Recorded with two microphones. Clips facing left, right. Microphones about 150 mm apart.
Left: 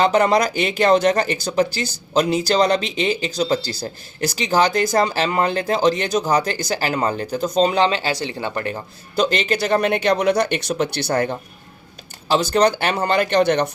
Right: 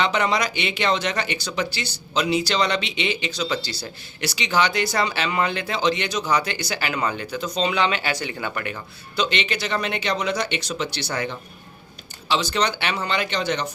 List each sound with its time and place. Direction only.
0.0 s speech: 45° left (ahead or behind)
9.1 s speech: 45° left (ahead or behind)